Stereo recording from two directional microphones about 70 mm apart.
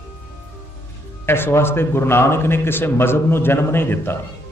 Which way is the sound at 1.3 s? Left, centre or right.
Left.